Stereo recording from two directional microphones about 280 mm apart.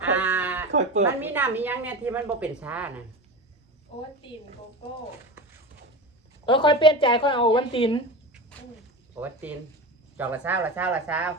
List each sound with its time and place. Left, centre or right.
0.2 s sheep: centre
1.2 s a woman's voice: centre
3.9 s a woman's voice: centre
6.4 s a woman's voice: centre
9.2 s speech: centre